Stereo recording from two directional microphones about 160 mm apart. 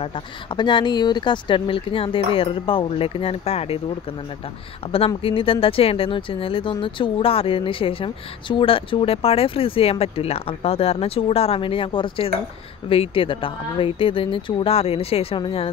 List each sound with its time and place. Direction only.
0.0 s speech: 30° left (ahead or behind)
4.9 s speech: 35° left (ahead or behind)